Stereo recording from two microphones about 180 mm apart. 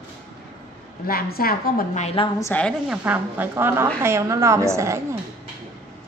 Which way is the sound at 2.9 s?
10° right (ahead or behind).